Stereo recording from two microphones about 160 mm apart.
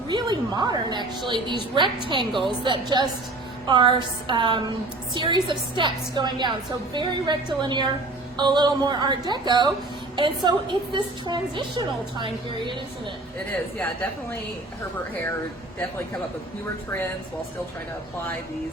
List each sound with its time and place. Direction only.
0.1 s a woman's voice: 25° right (ahead or behind)
13.7 s a woman's voice: 10° left (ahead or behind)